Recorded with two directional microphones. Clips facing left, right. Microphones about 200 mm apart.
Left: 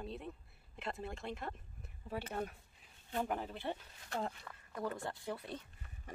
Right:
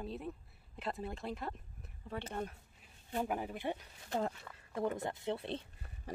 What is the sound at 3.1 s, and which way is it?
Speech, 10° right (ahead or behind).